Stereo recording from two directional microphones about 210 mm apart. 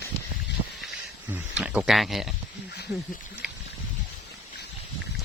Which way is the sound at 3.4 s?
5° right (ahead or behind).